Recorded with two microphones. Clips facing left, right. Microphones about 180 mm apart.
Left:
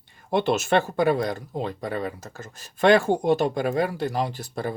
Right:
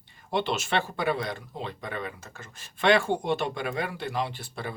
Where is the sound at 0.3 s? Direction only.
50° left (ahead or behind).